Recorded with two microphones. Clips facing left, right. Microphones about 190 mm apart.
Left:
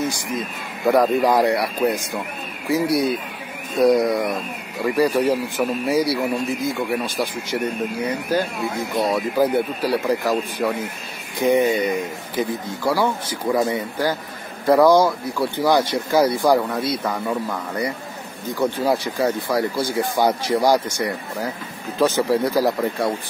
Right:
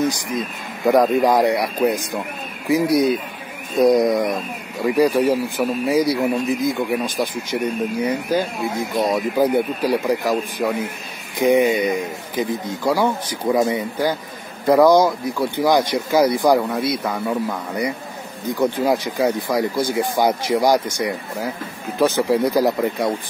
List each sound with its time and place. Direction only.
0.8 s speech: 15° right (ahead or behind)
3.8 s speech: 15° right (ahead or behind)